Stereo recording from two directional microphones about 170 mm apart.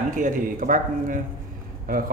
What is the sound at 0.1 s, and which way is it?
A man's voice, 50° right (ahead or behind).